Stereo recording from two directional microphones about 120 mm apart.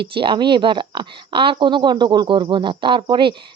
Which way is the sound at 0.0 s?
45° right (ahead or behind).